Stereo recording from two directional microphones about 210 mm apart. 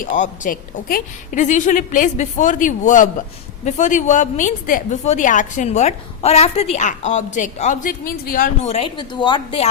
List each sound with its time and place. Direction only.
0.0 s a woman's voice: 40° left (ahead or behind)
8.6 s a woman's voice: 30° left (ahead or behind)